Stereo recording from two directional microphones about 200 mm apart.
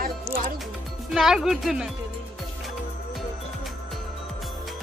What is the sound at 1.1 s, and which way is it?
Speech, centre (ahead or behind).